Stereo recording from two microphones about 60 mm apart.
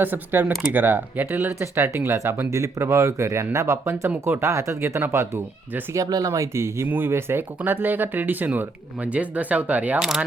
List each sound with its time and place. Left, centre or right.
0.0 s speech: right
2.5 s speech: right
5.9 s speech: right
6.8 s speech: right
10.0 s speech: centre